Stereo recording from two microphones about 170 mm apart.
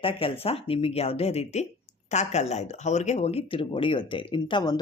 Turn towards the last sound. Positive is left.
turn(degrees=25)  # may be behind; listen again after turning